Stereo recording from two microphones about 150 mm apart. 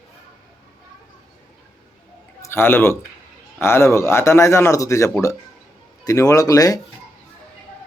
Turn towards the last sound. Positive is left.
turn(degrees=20)  # may be behind; listen again after turning